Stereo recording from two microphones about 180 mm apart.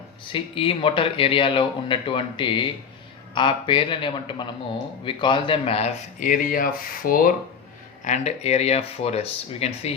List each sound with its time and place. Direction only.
0.3 s speech: 30° left (ahead or behind); by 7.3 s 50° left (ahead or behind)
8.0 s speech: 40° left (ahead or behind)